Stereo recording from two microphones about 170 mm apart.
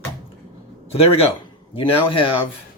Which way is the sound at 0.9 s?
35° left (ahead or behind).